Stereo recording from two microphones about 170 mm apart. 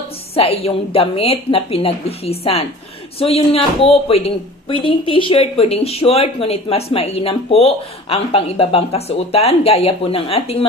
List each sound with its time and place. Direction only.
0.3 s speech: 35° left (ahead or behind)